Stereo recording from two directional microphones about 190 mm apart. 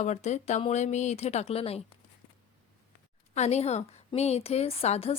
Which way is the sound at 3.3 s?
35° left (ahead or behind).